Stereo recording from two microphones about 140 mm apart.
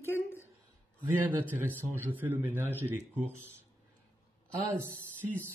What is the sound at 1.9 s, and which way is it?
A man's voice, 15° right (ahead or behind).